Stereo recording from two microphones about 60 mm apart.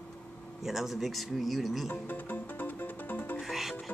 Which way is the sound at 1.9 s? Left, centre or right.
Left.